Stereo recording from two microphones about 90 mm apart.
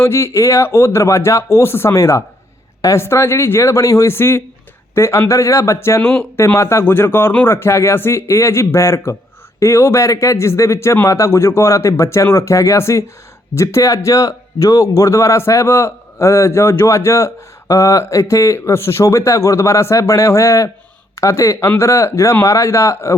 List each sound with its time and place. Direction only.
0.0 s speech: 30° left (ahead or behind)